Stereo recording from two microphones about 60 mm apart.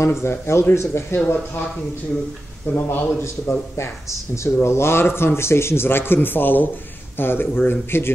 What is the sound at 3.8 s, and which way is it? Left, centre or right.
Speech, left.